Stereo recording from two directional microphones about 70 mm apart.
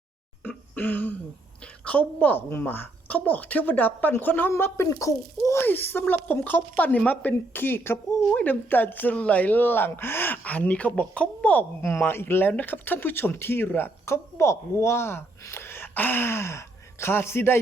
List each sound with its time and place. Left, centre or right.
0.4 s a sound: left
1.8 s speech: centre
4.5 s speech: left
4.9 s a child's voice: left
5.6 s speech: left
11.8 s speech: left